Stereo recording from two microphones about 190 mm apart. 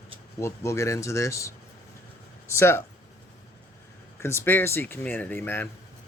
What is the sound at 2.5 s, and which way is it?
Speech, 15° left (ahead or behind).